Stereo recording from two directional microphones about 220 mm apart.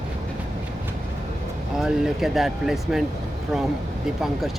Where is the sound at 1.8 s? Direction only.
Centre (ahead or behind).